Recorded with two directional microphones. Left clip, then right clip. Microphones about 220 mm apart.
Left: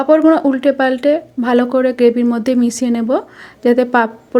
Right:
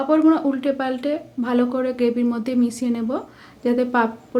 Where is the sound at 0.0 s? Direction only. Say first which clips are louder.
Left 7 dB; 25° left (ahead or behind).